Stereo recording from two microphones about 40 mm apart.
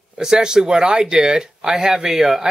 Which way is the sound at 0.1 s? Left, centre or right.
Centre.